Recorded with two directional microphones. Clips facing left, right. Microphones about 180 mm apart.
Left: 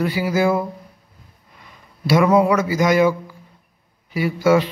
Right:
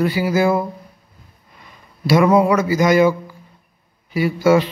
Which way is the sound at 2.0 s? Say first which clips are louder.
Right 1 dB; 30° right (ahead or behind).